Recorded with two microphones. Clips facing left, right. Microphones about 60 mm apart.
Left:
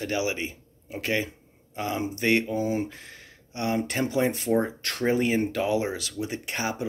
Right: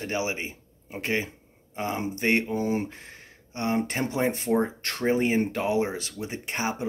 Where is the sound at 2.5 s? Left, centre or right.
Right.